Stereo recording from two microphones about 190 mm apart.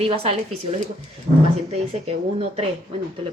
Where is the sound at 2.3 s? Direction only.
35° right (ahead or behind).